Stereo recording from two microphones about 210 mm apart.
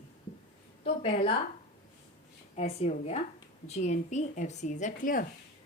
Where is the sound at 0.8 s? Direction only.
25° left (ahead or behind).